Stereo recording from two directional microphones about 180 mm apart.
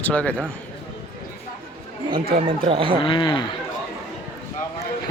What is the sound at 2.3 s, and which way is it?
Speech, 30° right (ahead or behind).